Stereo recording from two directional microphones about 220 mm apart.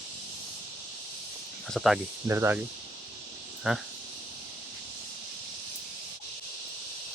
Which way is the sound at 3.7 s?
5° right (ahead or behind).